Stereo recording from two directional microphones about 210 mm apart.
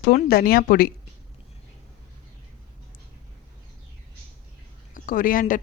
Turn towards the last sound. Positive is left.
turn(degrees=40)  # may be behind; listen again after turning